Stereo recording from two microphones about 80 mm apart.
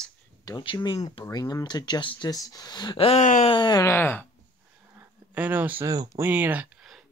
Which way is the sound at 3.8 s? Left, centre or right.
Left.